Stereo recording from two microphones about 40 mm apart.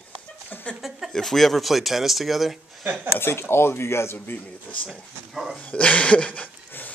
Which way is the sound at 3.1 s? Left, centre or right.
Left.